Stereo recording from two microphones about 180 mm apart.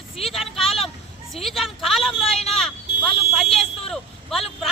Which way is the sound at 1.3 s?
Centre (ahead or behind).